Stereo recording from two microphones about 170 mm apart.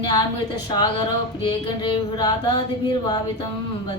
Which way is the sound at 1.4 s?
25° left (ahead or behind).